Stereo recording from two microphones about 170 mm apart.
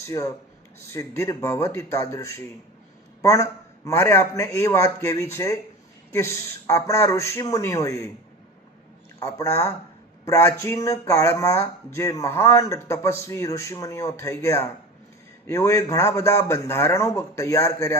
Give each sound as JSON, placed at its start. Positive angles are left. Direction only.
{"t": 0.0, "sound": "speech", "side_deg": 15}
{"t": 9.2, "sound": "speech", "side_deg": 15}